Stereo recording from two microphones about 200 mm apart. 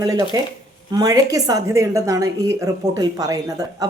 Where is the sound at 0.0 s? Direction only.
15° right (ahead or behind).